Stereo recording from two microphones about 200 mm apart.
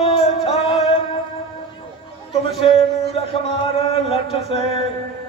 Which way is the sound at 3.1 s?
30° left (ahead or behind).